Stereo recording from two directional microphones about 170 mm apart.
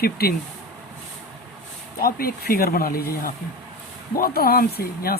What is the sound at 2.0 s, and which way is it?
Speech, 60° left (ahead or behind).